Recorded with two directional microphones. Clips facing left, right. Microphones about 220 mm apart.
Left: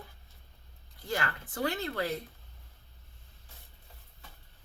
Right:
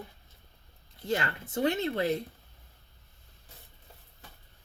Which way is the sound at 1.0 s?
20° right (ahead or behind).